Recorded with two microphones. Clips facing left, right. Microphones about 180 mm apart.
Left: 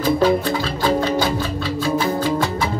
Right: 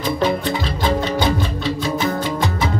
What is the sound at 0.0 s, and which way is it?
Music, 20° right (ahead or behind).